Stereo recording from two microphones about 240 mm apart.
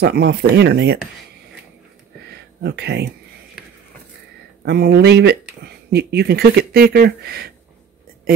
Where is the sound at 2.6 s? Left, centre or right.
Right.